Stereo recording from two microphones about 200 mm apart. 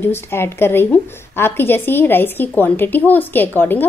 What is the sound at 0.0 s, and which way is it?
A woman's voice, 10° left (ahead or behind).